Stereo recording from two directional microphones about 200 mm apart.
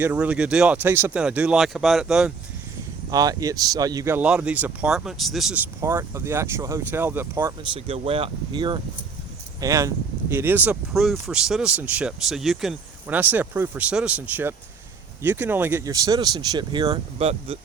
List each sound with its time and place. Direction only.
0.0 s speech: 10° right (ahead or behind)
3.1 s speech: 20° right (ahead or behind); by 5.5 s centre (ahead or behind)
5.8 s speech: 10° right (ahead or behind)
7.6 s speech: 25° right (ahead or behind)